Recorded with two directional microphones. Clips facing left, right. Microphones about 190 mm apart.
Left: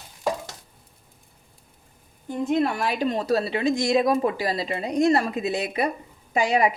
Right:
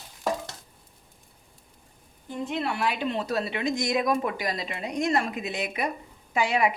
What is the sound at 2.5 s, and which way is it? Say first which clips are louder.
Speech: left 5 dB; 45° left (ahead or behind).